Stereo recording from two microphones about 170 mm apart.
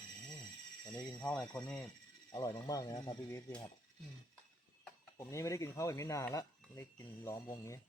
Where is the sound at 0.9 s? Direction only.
5° left (ahead or behind).